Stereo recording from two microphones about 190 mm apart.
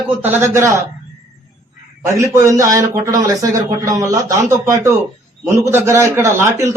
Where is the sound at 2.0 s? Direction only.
15° right (ahead or behind).